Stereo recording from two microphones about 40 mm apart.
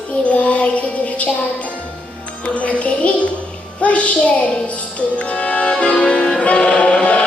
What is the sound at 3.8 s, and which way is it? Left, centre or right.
Speech, left.